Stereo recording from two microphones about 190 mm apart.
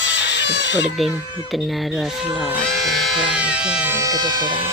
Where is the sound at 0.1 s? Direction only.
70° left (ahead or behind).